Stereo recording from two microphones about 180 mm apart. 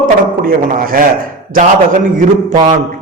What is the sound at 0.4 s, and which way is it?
A man's voice, 55° right (ahead or behind).